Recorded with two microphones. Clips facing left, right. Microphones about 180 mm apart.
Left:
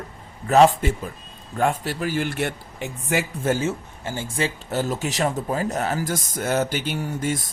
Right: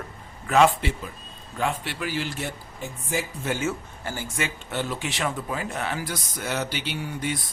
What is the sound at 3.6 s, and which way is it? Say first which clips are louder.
Speech: left 2 dB; 25° left (ahead or behind).